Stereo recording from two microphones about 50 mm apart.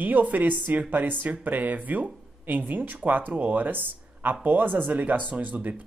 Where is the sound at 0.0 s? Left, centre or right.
Right.